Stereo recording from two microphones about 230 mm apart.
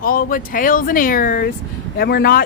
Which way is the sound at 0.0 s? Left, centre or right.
Left.